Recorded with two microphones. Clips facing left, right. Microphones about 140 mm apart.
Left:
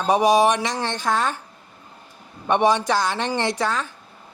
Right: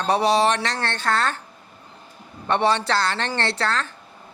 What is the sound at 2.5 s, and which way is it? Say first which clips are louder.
Speech: left 2 dB; 15° left (ahead or behind).